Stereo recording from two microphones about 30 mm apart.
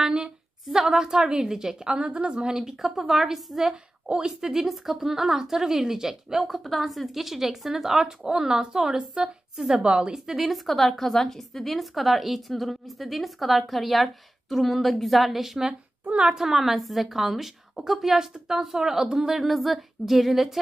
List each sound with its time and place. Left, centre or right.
0.0 s a sound: right
0.7 s a woman's voice: centre
2.8 s a woman's voice: centre
6.4 s a woman's voice: centre; by 10.1 s right
10.1 s a woman's voice: centre
10.4 s a woman's voice: centre
19.4 s a woman's voice: centre